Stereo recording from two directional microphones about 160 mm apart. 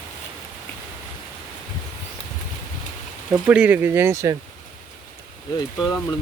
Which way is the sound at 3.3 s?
5° right (ahead or behind).